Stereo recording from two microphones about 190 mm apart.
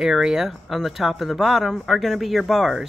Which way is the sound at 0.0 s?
5° right (ahead or behind).